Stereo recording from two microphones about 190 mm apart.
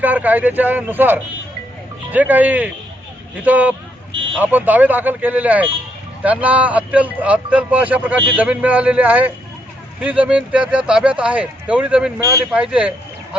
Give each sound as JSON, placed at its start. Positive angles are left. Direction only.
{"t": 0.0, "sound": "speech", "side_deg": -10}
{"t": 12.2, "sound": "speech", "side_deg": -20}
{"t": 12.5, "sound": "speech", "side_deg": -5}